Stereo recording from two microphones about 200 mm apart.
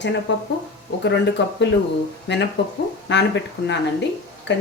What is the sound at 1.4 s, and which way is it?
Speech, 60° left (ahead or behind).